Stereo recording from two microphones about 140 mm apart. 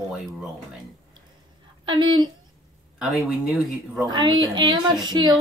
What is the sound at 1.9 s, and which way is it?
Child singing, 35° right (ahead or behind).